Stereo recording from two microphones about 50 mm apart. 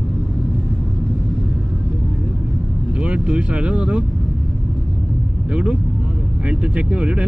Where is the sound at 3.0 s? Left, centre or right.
Right.